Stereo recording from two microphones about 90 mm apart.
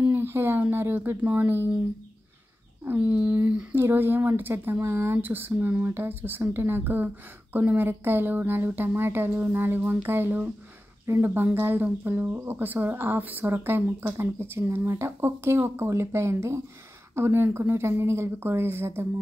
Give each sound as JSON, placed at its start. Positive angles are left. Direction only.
{"t": 0.1, "sound": "speech", "side_deg": -25}
{"t": 2.8, "sound": "a sound", "side_deg": -20}
{"t": 3.7, "sound": "speech", "side_deg": -25}